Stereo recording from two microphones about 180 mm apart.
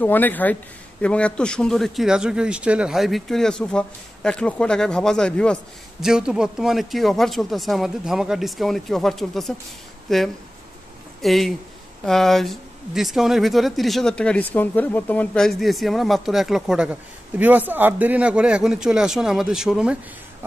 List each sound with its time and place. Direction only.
0.0 s speech: 10° left (ahead or behind)